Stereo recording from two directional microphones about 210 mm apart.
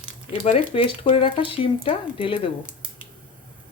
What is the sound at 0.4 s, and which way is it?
Speech, 25° left (ahead or behind).